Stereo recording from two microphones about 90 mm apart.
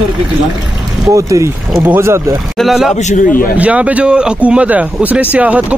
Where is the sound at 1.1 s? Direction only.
35° right (ahead or behind).